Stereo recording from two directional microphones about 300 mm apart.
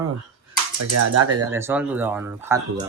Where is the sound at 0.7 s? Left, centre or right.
Right.